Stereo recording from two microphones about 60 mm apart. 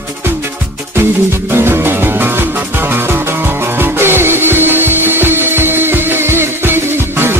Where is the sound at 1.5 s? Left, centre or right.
Right.